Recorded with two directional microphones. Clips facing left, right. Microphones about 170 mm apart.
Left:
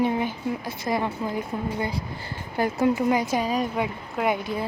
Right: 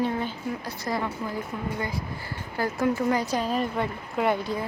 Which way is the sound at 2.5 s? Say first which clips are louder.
Left 3 dB; 15° left (ahead or behind).